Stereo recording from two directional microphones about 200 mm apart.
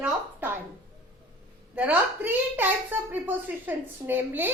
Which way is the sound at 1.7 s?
10° right (ahead or behind).